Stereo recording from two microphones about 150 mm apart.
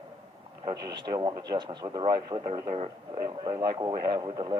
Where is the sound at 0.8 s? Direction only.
30° right (ahead or behind).